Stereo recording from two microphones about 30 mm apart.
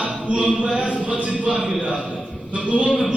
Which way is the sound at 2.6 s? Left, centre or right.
Right.